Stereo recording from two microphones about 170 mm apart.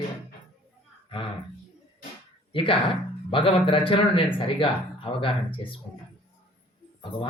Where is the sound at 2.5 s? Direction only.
30° left (ahead or behind).